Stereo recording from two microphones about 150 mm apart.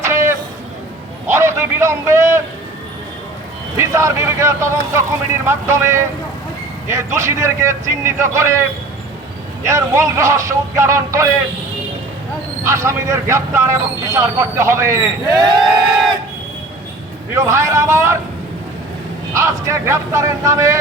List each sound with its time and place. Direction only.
0.0 s a sound: 20° right (ahead or behind)
3.8 s a man's voice: 20° right (ahead or behind)
9.6 s a man's voice: 20° right (ahead or behind)
12.6 s a man's voice: 20° right (ahead or behind)
17.3 s a man's voice: 20° right (ahead or behind)
19.3 s a man's voice: 20° right (ahead or behind)